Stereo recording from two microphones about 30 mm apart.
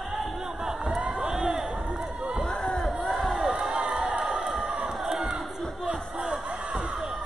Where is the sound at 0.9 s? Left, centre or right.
Right.